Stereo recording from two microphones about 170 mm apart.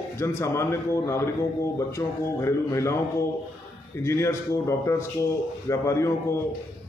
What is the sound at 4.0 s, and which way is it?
A man's voice, 15° left (ahead or behind).